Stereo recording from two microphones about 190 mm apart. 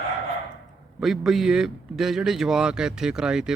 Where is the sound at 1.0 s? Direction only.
Centre (ahead or behind).